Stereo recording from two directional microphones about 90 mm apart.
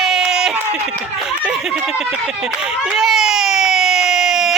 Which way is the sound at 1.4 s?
10° right (ahead or behind).